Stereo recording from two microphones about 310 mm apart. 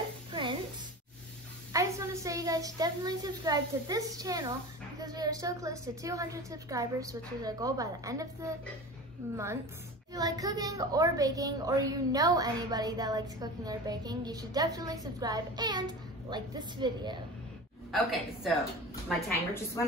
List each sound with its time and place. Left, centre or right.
0.3 s a sound: centre
1.7 s a woman's voice: centre
17.9 s a woman's voice: centre